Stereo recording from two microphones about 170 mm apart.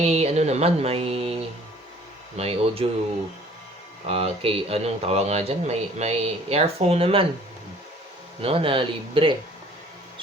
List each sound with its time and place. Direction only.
0.0 s speech: 40° right (ahead or behind)
2.3 s speech: 35° right (ahead or behind)
4.1 s speech: 35° right (ahead or behind)
8.4 s speech: 35° right (ahead or behind)